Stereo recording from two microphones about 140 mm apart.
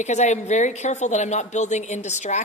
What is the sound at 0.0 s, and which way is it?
Speech, 55° left (ahead or behind).